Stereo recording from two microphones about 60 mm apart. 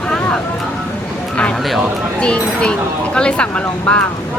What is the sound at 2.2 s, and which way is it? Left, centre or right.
Speech, centre.